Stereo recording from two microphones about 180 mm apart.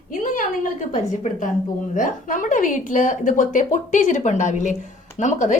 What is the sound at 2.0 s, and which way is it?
A woman's voice, 45° left (ahead or behind).